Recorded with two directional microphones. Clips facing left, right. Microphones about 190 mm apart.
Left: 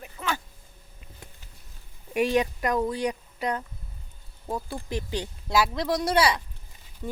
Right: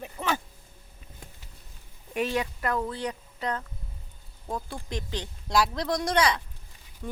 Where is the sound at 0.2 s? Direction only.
30° right (ahead or behind).